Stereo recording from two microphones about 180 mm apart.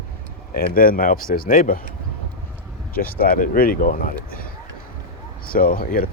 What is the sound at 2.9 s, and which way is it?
Speech, 55° left (ahead or behind).